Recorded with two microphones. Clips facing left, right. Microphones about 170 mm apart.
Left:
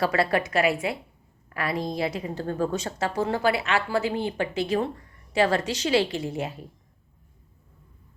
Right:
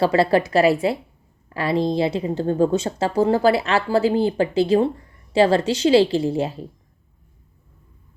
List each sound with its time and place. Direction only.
0.0 s speech: 30° right (ahead or behind)